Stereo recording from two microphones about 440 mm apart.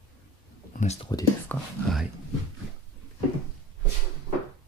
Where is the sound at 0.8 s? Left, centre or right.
Centre.